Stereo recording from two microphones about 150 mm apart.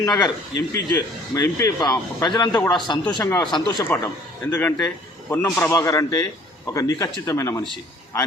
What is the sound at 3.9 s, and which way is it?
A man's voice, 10° left (ahead or behind).